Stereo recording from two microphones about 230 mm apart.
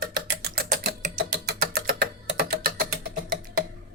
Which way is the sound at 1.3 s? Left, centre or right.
Right.